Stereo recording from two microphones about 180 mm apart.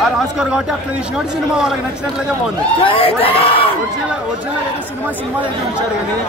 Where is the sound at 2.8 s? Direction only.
30° left (ahead or behind).